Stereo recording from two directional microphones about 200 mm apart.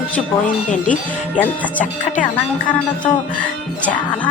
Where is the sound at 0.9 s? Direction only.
5° left (ahead or behind).